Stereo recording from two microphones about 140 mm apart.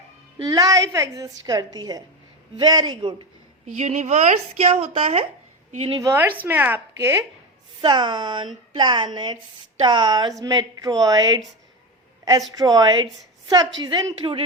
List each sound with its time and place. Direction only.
0.3 s a woman's voice: 30° right (ahead or behind)
3.8 s speech: 55° right (ahead or behind)
6.0 s speech: 20° right (ahead or behind)
7.8 s a woman's voice: 30° right (ahead or behind)
12.5 s a woman's voice: 30° right (ahead or behind)